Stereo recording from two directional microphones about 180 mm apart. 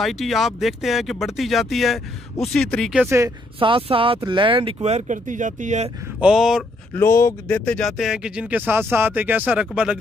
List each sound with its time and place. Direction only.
0.0 s speech: centre (ahead or behind)
3.5 s speech: 30° right (ahead or behind)
6.2 s speech: 5° right (ahead or behind)
7.0 s speech: 15° left (ahead or behind); by 9.9 s 5° right (ahead or behind)